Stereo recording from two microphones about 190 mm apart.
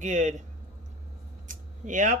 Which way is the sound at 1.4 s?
40° right (ahead or behind).